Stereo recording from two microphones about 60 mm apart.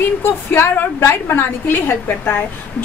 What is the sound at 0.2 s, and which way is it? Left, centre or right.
A woman's voice, left.